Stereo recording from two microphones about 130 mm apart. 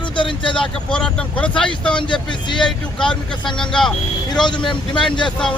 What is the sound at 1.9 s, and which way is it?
Speech, 35° left (ahead or behind).